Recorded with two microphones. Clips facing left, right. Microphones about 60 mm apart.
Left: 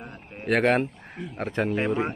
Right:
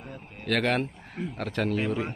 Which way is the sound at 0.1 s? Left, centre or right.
Left.